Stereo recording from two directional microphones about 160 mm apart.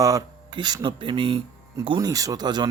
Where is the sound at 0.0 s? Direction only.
20° right (ahead or behind).